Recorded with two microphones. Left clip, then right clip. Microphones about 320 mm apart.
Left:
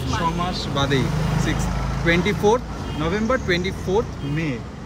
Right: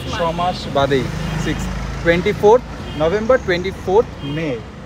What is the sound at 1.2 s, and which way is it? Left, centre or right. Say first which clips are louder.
Speech: right 1 dB; left.